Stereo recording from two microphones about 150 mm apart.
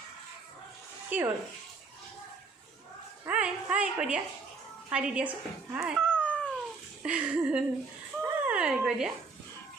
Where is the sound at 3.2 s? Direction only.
5° right (ahead or behind).